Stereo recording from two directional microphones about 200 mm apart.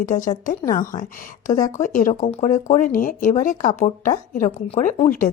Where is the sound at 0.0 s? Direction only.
40° left (ahead or behind).